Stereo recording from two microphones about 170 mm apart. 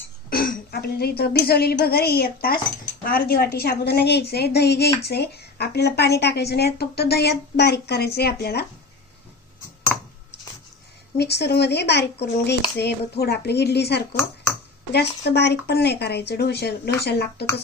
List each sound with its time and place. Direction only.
0.3 s a woman's voice: 60° left (ahead or behind)
9.9 s a sound: 5° left (ahead or behind)
11.2 s a woman's voice: 75° left (ahead or behind)